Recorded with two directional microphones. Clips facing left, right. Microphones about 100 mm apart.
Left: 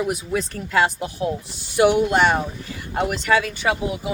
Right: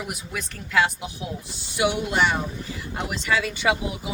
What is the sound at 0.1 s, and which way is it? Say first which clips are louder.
Speech: left 9 dB; 35° left (ahead or behind).